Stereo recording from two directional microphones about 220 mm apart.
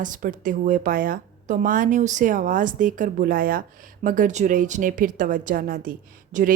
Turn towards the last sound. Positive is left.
turn(degrees=-35)  # may be behind; listen again after turning